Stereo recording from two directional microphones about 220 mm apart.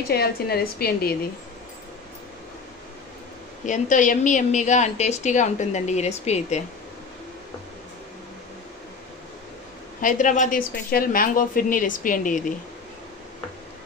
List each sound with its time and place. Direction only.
0.1 s a woman's voice: 45° left (ahead or behind)
3.6 s a woman's voice: 35° left (ahead or behind)
10.0 s a woman's voice: 35° left (ahead or behind)